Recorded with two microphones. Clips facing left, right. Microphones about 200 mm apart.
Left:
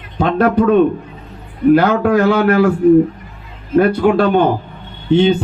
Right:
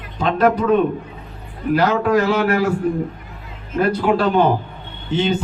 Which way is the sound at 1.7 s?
60° left (ahead or behind).